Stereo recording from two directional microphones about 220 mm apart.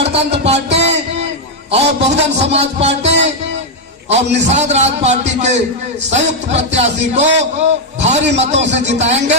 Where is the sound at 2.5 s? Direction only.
30° right (ahead or behind).